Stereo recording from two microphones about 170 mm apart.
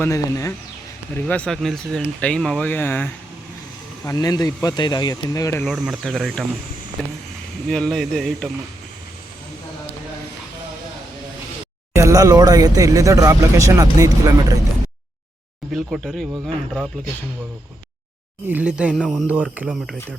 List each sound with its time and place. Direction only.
0.0 s speech: 20° left (ahead or behind)
1.1 s speech: 10° left (ahead or behind)
5.6 s speech: centre (ahead or behind)
11.9 s speech: 20° right (ahead or behind)
15.7 s speech: centre (ahead or behind)
18.4 s speech: 10° right (ahead or behind)
18.9 s speech: 5° left (ahead or behind)
19.3 s speech: 10° right (ahead or behind)